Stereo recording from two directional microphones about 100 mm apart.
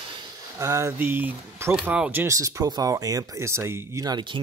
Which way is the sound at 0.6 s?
30° right (ahead or behind).